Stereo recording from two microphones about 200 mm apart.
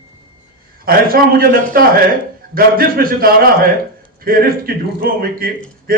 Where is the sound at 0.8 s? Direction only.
45° right (ahead or behind).